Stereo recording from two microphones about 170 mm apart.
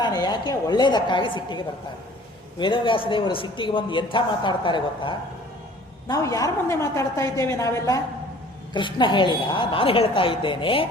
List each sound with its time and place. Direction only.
0.0 s a man's voice: 25° left (ahead or behind)